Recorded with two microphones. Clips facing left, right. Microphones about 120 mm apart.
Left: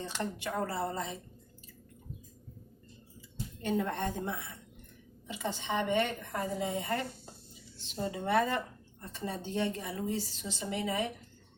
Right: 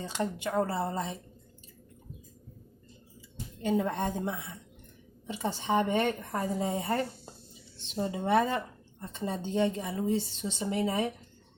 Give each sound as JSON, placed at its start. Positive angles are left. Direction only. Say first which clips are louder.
{"t": 0.0, "sound": "a woman's voice", "louder": "right 4 dB", "side_deg": -15}
{"t": 3.6, "sound": "a woman's voice", "louder": "right 3 dB", "side_deg": -15}
{"t": 5.3, "sound": "a woman's voice", "louder": "right 5 dB", "side_deg": -35}
{"t": 8.1, "sound": "a woman's voice", "louder": "right 3 dB", "side_deg": -25}
{"t": 10.8, "sound": "a woman's voice", "louder": "right 4 dB", "side_deg": -40}